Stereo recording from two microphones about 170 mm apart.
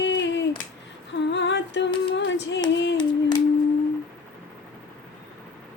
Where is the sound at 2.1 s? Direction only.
90° left.